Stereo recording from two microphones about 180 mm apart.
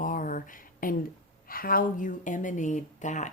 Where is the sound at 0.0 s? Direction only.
50° left (ahead or behind).